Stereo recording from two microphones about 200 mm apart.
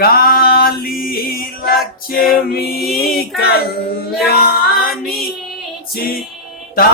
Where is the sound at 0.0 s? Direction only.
50° left (ahead or behind).